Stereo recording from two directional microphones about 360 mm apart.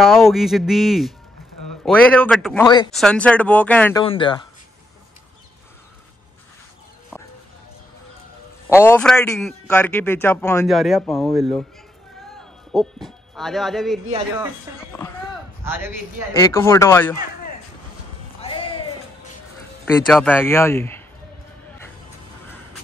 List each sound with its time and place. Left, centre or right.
0.0 s a man's voice: centre
8.6 s a man's voice: centre
12.7 s a woman's voice: centre
14.9 s speech: centre
15.6 s a man's voice: centre
16.3 s speech: centre
18.4 s a sound: centre
19.8 s speech: centre